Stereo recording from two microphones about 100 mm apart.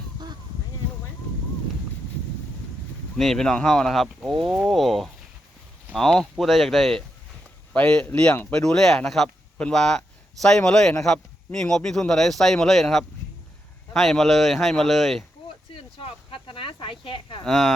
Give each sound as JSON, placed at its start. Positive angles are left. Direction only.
{"t": 3.2, "sound": "speech", "side_deg": 5}
{"t": 7.7, "sound": "speech", "side_deg": 10}
{"t": 15.7, "sound": "a sound", "side_deg": 65}
{"t": 17.4, "sound": "speech", "side_deg": 5}